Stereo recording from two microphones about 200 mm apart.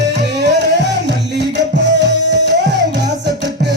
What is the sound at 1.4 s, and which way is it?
Music, 60° right (ahead or behind).